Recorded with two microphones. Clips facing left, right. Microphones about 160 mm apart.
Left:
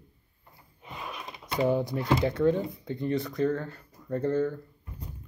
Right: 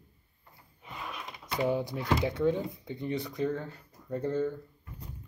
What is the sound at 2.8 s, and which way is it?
Speech, 15° right (ahead or behind).